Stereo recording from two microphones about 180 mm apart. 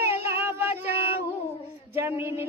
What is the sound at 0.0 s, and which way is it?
Child singing, 15° right (ahead or behind).